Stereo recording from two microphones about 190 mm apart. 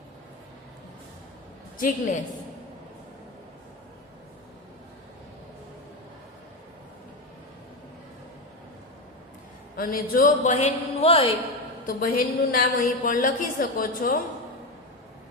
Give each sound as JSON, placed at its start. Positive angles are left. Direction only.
{"t": 1.8, "sound": "a woman's voice", "side_deg": 45}
{"t": 9.7, "sound": "a man's voice", "side_deg": 50}
{"t": 11.9, "sound": "a woman's voice", "side_deg": 50}